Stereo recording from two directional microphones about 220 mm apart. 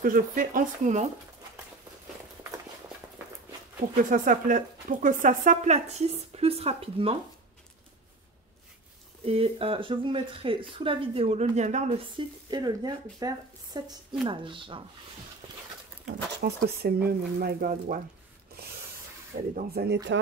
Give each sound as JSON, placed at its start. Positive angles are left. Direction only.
{"t": 0.0, "sound": "speech", "side_deg": -40}
{"t": 4.0, "sound": "speech", "side_deg": -35}
{"t": 9.2, "sound": "speech", "side_deg": -25}
{"t": 12.4, "sound": "speech", "side_deg": -20}
{"t": 16.1, "sound": "speech", "side_deg": -45}
{"t": 19.5, "sound": "speech", "side_deg": -45}